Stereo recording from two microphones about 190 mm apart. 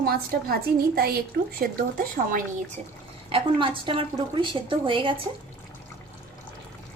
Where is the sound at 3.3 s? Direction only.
25° right (ahead or behind).